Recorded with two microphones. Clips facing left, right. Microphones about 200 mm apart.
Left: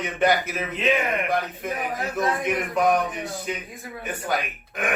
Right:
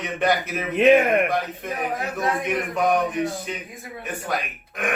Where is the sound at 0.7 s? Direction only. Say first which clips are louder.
Right 9 dB; 55° right (ahead or behind).